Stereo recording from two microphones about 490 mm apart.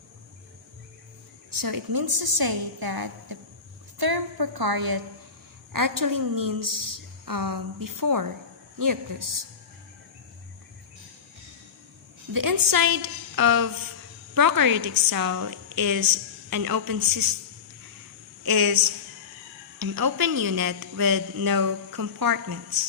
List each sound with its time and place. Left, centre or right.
1.5 s a woman's voice: right
12.3 s a woman's voice: right
18.4 s speech: right